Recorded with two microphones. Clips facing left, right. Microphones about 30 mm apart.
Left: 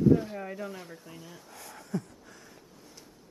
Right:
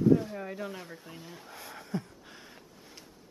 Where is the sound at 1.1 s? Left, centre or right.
Right.